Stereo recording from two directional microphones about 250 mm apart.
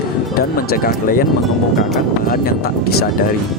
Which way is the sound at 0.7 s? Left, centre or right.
Left.